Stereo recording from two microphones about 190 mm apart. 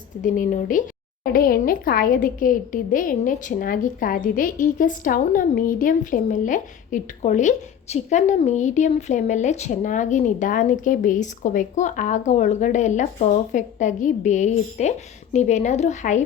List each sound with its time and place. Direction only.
0.2 s speech: 45° left (ahead or behind)